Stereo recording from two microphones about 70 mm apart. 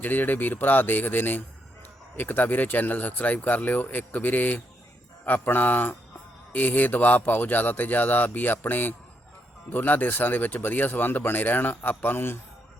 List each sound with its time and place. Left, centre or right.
0.0 s speech: left